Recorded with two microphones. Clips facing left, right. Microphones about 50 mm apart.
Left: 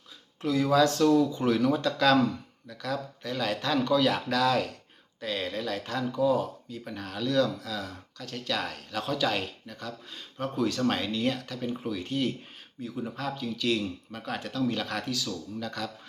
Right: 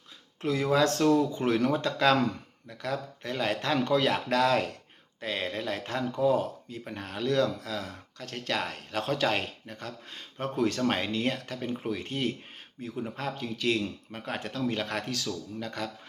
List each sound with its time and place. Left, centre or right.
0.4 s speech: right
10.8 s speech: right
11.0 s speech: right